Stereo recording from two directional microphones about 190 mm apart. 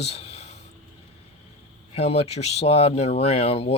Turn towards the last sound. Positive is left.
turn(degrees=30)  # may be behind; listen again after turning